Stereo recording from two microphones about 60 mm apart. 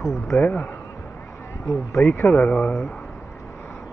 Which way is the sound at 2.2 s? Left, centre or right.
Left.